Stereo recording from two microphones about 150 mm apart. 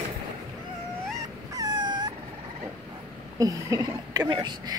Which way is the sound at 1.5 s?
25° right (ahead or behind).